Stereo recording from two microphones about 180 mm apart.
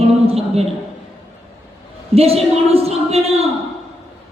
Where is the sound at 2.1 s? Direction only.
35° right (ahead or behind).